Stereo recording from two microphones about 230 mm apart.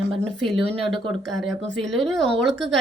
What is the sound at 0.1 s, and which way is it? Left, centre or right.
Speech, centre.